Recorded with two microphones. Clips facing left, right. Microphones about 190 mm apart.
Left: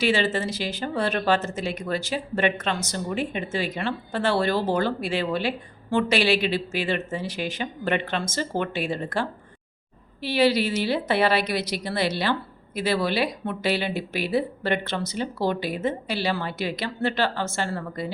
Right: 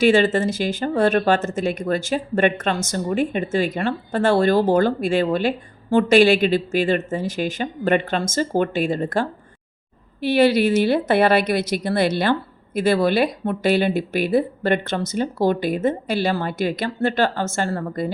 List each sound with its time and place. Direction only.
0.0 s speech: 50° right (ahead or behind)